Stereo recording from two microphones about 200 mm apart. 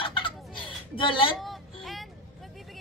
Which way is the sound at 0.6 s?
25° left (ahead or behind).